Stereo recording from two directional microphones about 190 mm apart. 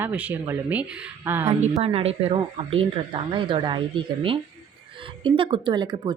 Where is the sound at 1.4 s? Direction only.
30° right (ahead or behind).